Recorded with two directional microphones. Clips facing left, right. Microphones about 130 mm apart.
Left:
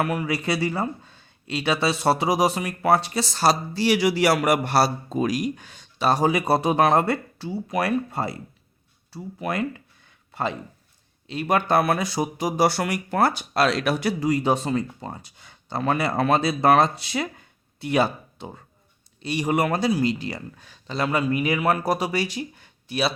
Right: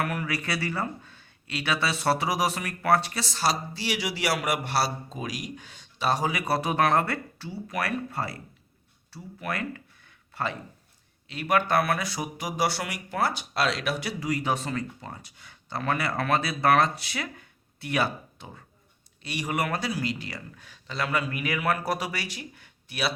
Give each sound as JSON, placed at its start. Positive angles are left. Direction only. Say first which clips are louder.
{"t": 0.0, "sound": "speech", "louder": "left 5 dB", "side_deg": 20}
{"t": 3.3, "sound": "speech", "louder": "left 6 dB", "side_deg": 40}
{"t": 6.3, "sound": "speech", "louder": "left 6 dB", "side_deg": 20}
{"t": 12.6, "sound": "speech", "louder": "left 6 dB", "side_deg": 45}
{"t": 14.2, "sound": "speech", "louder": "left 6 dB", "side_deg": 25}